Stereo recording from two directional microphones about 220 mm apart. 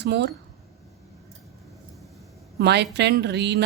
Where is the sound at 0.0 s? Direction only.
50° right (ahead or behind).